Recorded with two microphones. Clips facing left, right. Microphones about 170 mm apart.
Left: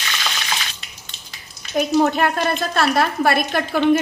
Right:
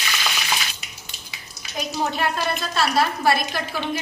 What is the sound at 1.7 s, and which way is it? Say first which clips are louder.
A woman's voice: left 9 dB; 55° left (ahead or behind).